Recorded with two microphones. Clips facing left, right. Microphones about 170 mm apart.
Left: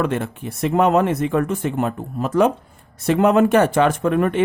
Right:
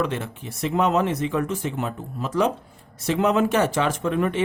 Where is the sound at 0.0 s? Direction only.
55° left (ahead or behind).